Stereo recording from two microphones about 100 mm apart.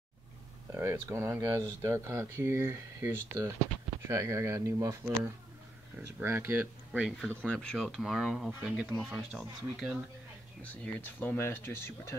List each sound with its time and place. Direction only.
0.7 s speech: 25° right (ahead or behind)
6.2 s speech: 25° right (ahead or behind)
7.0 s speech: 5° right (ahead or behind)
7.2 s speech: 10° left (ahead or behind); by 9.9 s 5° right (ahead or behind)
10.6 s speech: 15° left (ahead or behind)